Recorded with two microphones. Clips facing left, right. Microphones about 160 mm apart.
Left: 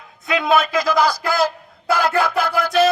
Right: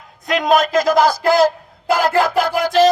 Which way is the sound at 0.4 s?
40° right (ahead or behind).